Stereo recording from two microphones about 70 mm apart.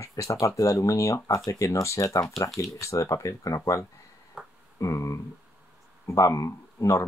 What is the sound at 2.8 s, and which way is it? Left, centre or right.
Speech, left.